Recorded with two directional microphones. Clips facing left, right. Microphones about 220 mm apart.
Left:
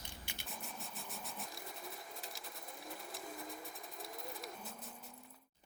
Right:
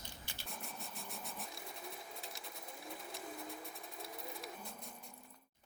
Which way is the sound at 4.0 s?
Centre (ahead or behind).